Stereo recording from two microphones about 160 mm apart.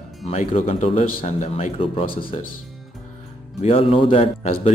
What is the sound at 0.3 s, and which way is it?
Speech, 40° left (ahead or behind).